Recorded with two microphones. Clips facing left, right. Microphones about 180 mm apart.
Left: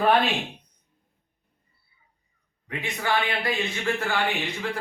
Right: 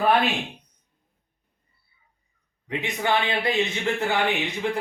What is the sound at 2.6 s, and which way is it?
Speech, 20° right (ahead or behind).